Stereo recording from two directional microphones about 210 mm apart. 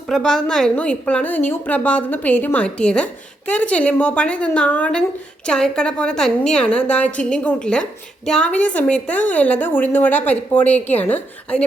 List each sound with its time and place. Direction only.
0.1 s a woman's voice: 5° left (ahead or behind)